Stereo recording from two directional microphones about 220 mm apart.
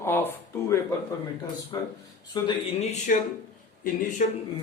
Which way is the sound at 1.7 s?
15° left (ahead or behind).